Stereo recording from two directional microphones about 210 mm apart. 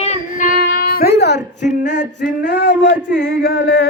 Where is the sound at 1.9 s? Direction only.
55° left (ahead or behind).